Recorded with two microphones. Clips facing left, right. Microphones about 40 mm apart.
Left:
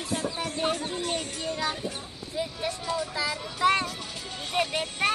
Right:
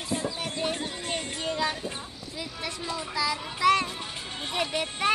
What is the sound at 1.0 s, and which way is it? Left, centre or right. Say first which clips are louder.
Speech: even; right.